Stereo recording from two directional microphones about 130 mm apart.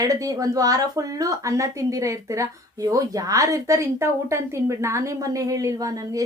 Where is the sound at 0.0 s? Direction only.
25° right (ahead or behind).